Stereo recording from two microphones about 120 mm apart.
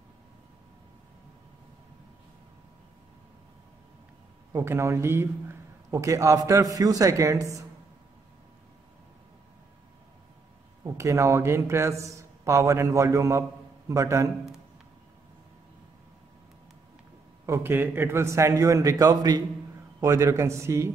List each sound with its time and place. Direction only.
4.5 s a man's voice: 25° right (ahead or behind)
10.8 s a man's voice: 25° right (ahead or behind)
17.5 s a man's voice: 15° right (ahead or behind)